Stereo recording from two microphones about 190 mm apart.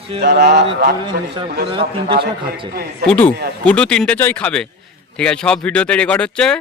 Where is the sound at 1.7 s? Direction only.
25° right (ahead or behind).